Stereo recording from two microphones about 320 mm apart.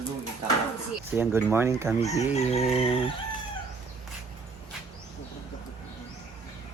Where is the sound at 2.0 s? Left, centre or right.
Centre.